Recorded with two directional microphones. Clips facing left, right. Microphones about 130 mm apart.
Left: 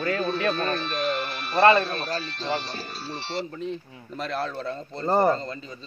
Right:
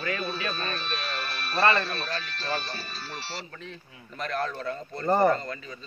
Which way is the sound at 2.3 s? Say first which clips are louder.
Left 3 dB; 20° left (ahead or behind).